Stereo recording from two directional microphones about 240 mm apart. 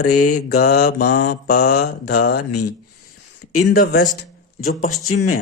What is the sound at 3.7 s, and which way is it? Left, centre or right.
Speech, left.